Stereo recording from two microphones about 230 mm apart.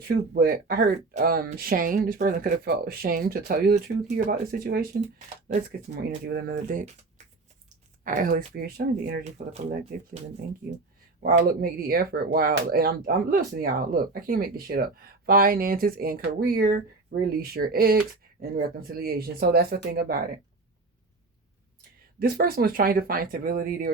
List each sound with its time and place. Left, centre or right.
0.3 s speech: right
8.0 s speech: right
11.2 s speech: right
22.2 s speech: right